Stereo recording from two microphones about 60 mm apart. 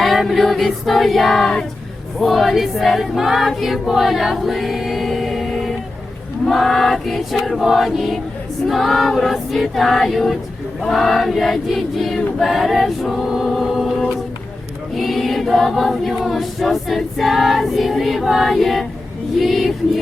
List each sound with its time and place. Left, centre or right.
0.0 s choir: centre
14.9 s choir: centre